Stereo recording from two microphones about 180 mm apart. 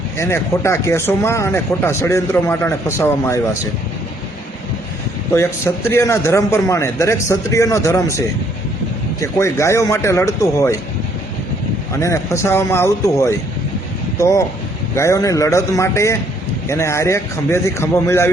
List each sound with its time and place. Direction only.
0.2 s speech: 15° left (ahead or behind)
5.3 s speech: 15° left (ahead or behind)
9.2 s speech: 15° left (ahead or behind)
11.9 s speech: 15° left (ahead or behind)